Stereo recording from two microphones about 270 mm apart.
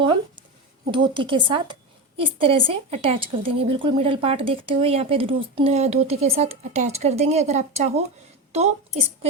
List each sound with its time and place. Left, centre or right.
0.9 s a woman's voice: centre